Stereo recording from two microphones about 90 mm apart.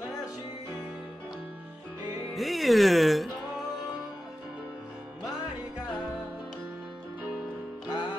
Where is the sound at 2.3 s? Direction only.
Centre (ahead or behind).